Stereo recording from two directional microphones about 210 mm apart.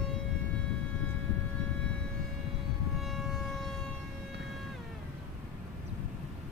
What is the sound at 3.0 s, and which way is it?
Civil defense siren, centre (ahead or behind).